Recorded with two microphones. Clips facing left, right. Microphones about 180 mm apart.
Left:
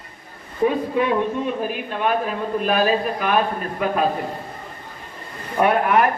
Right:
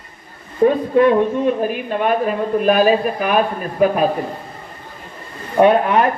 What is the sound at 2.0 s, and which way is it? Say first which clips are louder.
Speech: right 4 dB; 50° right (ahead or behind).